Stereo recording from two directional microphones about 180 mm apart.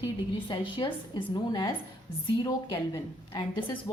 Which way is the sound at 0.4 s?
25° left (ahead or behind).